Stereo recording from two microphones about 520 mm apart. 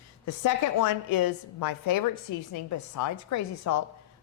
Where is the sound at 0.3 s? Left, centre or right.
Left.